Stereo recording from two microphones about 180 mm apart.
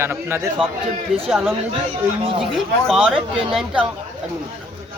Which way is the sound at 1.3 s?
Centre (ahead or behind).